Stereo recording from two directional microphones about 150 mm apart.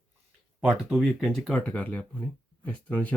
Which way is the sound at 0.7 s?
Centre (ahead or behind).